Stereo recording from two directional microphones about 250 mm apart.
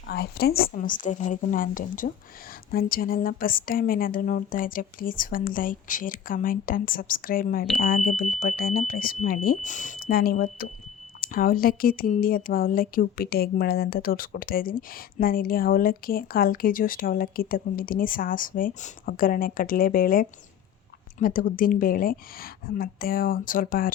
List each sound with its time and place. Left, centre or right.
0.1 s speech: left